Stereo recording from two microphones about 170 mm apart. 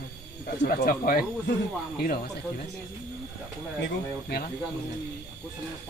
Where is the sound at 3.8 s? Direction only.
70° left (ahead or behind).